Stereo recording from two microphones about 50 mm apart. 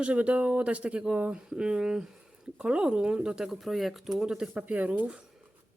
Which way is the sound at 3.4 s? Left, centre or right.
Centre.